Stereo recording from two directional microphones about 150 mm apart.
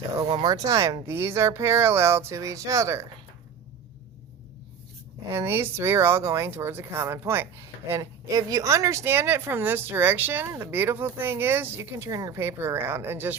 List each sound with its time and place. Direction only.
0.2 s speech: 30° right (ahead or behind)
5.3 s speech: 15° right (ahead or behind)